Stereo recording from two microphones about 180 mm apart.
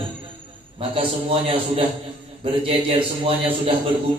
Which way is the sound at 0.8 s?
30° right (ahead or behind).